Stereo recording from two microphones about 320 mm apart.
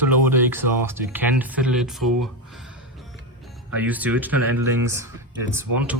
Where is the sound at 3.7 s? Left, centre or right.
Centre.